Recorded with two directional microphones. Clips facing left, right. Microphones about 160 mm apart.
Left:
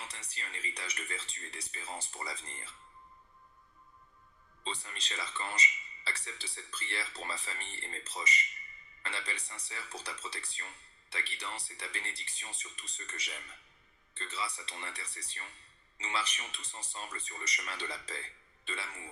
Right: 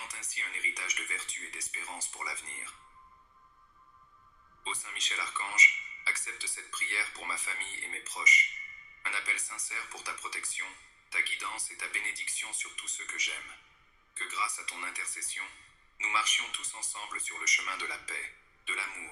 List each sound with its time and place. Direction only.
0.0 s speech: 30° left (ahead or behind)
4.6 s a man's voice: 30° left (ahead or behind)